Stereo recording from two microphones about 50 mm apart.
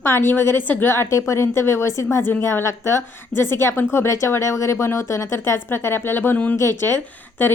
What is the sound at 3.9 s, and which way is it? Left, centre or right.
A woman's voice, left.